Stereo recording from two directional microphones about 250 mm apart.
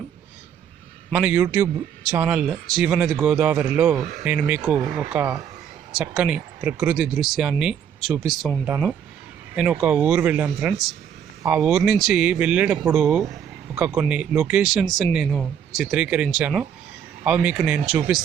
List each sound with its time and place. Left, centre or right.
1.1 s a man's voice: centre